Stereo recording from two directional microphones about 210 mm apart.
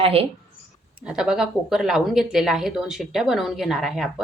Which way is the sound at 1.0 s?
5° right (ahead or behind).